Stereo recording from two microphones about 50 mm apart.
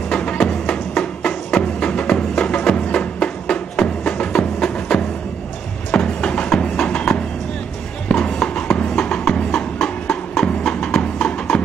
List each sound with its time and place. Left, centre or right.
0.1 s music: centre